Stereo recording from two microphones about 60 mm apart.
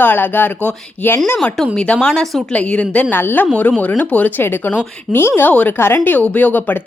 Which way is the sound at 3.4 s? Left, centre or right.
Left.